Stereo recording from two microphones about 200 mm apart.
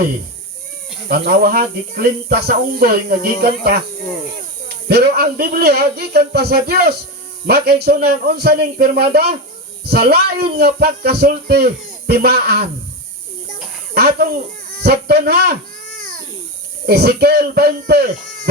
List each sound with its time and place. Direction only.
1.0 s speech: 50° right (ahead or behind)
13.9 s speech: 50° right (ahead or behind)
14.7 s baby cry: 50° right (ahead or behind)
16.8 s speech: 50° right (ahead or behind)